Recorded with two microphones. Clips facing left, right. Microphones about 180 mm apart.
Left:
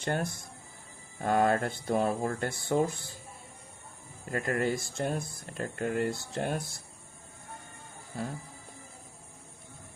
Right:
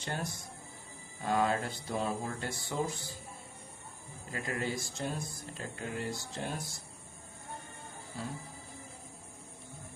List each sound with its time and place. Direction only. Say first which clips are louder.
0.0 s speech: left 6 dB; 55° left (ahead or behind)
4.3 s speech: left 7 dB; 55° left (ahead or behind)
8.1 s speech: left 5 dB; 55° left (ahead or behind)